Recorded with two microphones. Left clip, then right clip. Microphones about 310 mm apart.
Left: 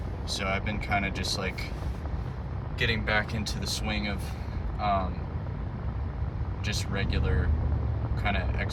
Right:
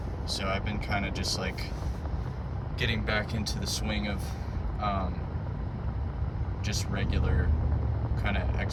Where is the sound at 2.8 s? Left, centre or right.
Centre.